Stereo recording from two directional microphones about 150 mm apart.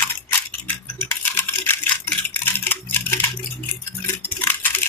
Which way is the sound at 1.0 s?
15° left (ahead or behind).